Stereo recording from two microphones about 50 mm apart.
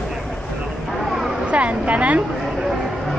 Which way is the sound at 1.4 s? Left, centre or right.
Right.